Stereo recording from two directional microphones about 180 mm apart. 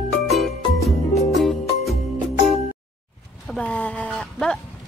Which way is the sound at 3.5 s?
10° left (ahead or behind).